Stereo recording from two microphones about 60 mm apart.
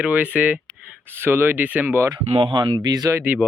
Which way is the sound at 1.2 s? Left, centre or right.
Right.